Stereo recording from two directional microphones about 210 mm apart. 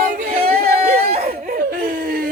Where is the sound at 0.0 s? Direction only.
40° right (ahead or behind).